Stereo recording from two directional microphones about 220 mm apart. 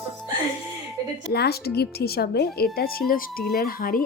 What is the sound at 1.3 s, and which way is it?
A woman's voice, 45° left (ahead or behind).